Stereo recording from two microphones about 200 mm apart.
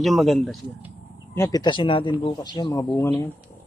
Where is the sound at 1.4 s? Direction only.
20° left (ahead or behind).